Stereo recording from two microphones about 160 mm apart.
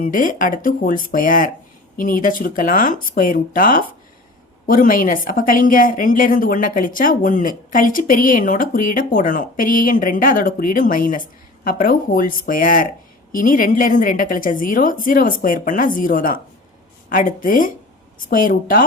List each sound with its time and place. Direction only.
0.0 s a woman's voice: 55° left (ahead or behind)